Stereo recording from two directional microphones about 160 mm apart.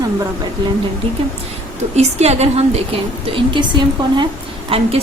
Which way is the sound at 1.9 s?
45° right (ahead or behind).